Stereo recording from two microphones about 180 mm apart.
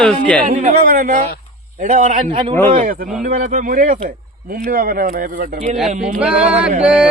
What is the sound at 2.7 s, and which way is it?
A man's voice, 50° right (ahead or behind).